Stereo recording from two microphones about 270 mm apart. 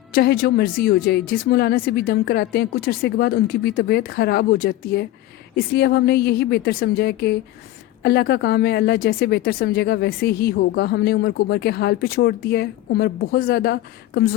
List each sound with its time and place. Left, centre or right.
0.1 s speech: left